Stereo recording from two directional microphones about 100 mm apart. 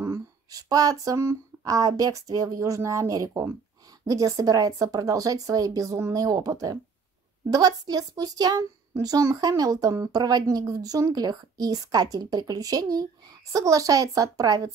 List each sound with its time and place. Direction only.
0.0 s speech: 35° right (ahead or behind)